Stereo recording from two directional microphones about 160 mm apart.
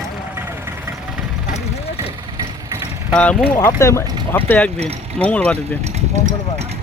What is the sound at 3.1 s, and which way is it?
Speech, 5° left (ahead or behind).